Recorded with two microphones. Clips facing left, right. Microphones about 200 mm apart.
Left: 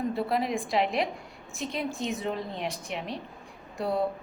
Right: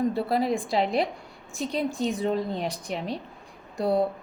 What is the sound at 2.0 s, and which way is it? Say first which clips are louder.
A woman's voice: right 5 dB; 35° right (ahead or behind).